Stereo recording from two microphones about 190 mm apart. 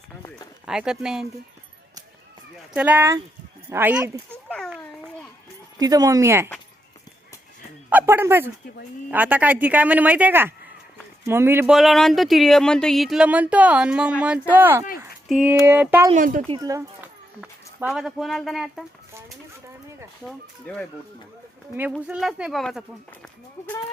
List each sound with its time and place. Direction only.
0.7 s speech: 5° right (ahead or behind)
2.7 s speech: 10° right (ahead or behind)
4.4 s a sound: 5° left (ahead or behind)
5.8 s speech: 20° right (ahead or behind)
7.9 s speech: 10° right (ahead or behind)
16.1 s a woman's voice: 45° right (ahead or behind)
16.5 s speech: 20° right (ahead or behind)
17.4 s speech: 5° right (ahead or behind)
20.7 s speech: 5° left (ahead or behind)
21.9 s speech: 5° right (ahead or behind)